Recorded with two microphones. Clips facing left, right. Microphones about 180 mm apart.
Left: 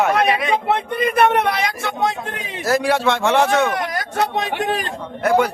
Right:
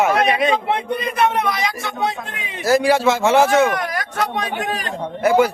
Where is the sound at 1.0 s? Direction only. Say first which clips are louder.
Left 7 dB; 55° left (ahead or behind).